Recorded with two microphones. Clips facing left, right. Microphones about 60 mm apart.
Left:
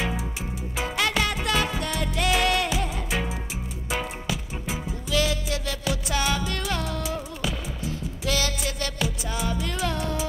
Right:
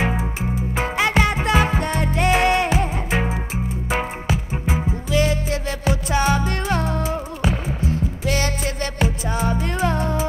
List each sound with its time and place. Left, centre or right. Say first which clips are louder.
0.0 s music: right 6 dB; right